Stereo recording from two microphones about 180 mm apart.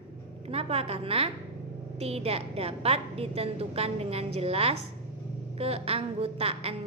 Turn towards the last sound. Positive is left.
turn(degrees=-35)  # may be behind; listen again after turning